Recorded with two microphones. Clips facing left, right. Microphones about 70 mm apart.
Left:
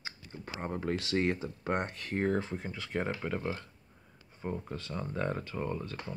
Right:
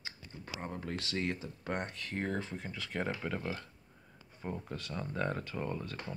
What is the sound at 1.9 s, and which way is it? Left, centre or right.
Speech, left.